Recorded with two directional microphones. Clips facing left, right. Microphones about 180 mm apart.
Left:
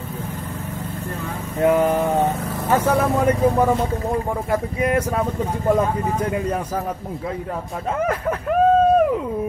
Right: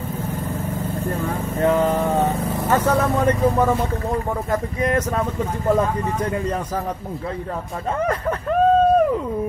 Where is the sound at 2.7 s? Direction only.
10° left (ahead or behind).